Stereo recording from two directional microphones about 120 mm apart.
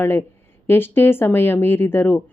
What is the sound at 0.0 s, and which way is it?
Speech, 20° left (ahead or behind).